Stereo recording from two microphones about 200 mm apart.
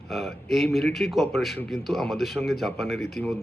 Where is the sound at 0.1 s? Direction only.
Centre (ahead or behind).